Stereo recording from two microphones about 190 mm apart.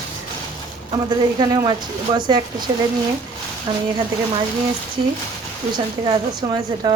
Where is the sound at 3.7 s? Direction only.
25° right (ahead or behind).